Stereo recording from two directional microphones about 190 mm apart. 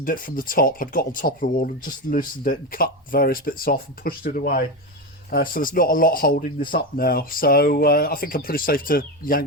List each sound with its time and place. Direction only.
0.0 s speech: 45° left (ahead or behind)